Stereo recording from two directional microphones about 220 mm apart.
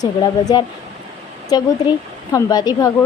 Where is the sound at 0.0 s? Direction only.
20° left (ahead or behind).